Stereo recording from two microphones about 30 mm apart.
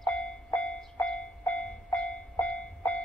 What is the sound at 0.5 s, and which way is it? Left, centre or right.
Train, left.